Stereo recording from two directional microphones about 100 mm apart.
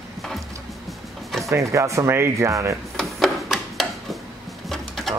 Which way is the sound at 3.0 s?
5° left (ahead or behind).